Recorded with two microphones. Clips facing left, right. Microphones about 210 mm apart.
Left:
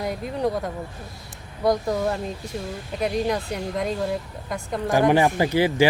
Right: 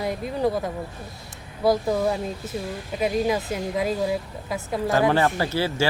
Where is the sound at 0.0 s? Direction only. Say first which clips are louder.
Right 1 dB; centre (ahead or behind).